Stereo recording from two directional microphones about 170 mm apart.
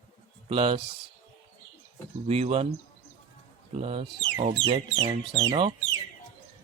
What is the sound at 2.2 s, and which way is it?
Speech, 35° right (ahead or behind).